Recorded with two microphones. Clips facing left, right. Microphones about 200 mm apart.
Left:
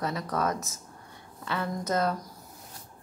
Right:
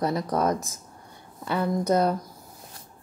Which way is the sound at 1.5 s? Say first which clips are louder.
Right 6 dB; 15° right (ahead or behind).